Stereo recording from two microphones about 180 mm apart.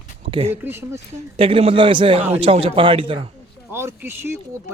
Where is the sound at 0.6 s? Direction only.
15° right (ahead or behind).